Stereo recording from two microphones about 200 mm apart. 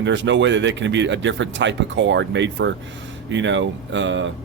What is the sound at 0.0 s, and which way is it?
Speech, 65° right (ahead or behind).